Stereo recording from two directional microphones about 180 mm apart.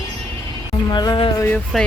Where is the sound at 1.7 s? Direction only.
Centre (ahead or behind).